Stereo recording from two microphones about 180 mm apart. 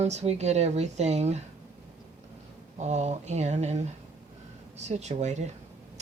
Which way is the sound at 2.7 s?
40° right (ahead or behind).